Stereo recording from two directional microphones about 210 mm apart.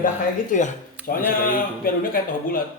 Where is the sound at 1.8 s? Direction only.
40° left (ahead or behind).